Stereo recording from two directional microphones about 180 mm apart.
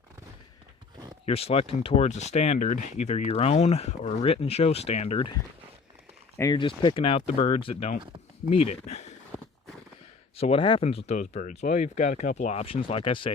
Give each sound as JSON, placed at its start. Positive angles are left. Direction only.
{"t": 1.2, "sound": "speech", "side_deg": 35}
{"t": 6.3, "sound": "speech", "side_deg": 20}
{"t": 10.3, "sound": "speech", "side_deg": 35}